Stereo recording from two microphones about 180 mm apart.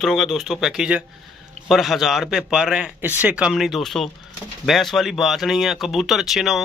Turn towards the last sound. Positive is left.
turn(degrees=0)  # may be behind; listen again after turning